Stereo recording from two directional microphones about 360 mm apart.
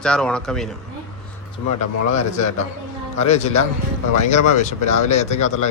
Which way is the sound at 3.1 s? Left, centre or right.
Centre.